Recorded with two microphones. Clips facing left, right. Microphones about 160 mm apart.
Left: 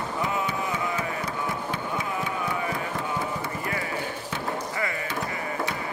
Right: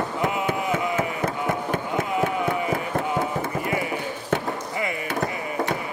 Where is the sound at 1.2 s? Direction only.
50° right (ahead or behind).